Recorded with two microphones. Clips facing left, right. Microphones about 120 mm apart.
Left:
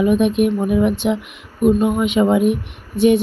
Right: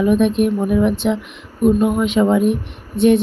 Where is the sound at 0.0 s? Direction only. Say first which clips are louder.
Even; 5° left (ahead or behind).